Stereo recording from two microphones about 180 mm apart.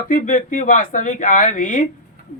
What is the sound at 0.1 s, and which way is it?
Speech, 50° left (ahead or behind).